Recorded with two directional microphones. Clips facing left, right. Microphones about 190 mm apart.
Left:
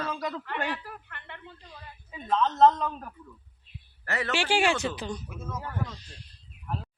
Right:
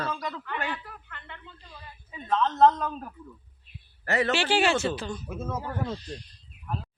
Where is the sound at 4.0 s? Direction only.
25° right (ahead or behind).